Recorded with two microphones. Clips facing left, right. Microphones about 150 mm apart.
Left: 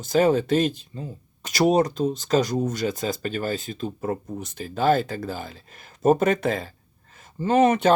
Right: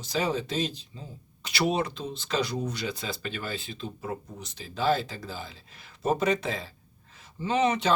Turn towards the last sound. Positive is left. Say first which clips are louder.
# left 7 dB
turn(degrees=50)  # may be behind; listen again after turning